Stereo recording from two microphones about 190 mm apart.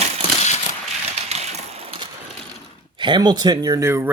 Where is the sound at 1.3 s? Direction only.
35° right (ahead or behind).